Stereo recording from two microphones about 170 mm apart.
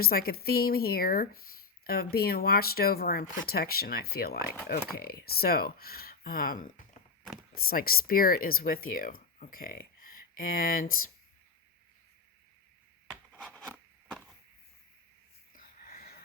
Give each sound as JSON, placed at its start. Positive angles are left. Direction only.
{"t": 0.0, "sound": "speech", "side_deg": 60}
{"t": 13.1, "sound": "rub", "side_deg": 5}
{"t": 15.5, "sound": "a sound", "side_deg": 55}